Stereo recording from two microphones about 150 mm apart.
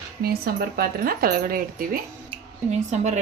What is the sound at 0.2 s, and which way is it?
Speech, 90° right.